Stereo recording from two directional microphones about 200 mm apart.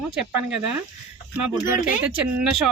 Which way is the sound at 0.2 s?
5° right (ahead or behind).